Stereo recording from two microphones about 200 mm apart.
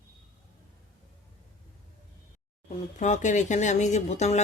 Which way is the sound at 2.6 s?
35° left (ahead or behind).